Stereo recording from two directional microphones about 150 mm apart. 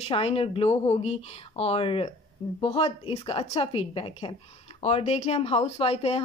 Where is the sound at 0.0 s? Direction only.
40° left (ahead or behind).